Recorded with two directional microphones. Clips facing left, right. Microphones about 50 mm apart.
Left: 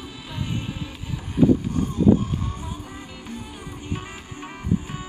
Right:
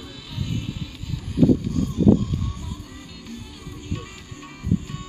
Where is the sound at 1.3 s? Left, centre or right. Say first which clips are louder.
Even; left.